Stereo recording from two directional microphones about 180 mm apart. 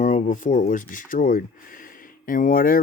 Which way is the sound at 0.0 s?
45° left (ahead or behind).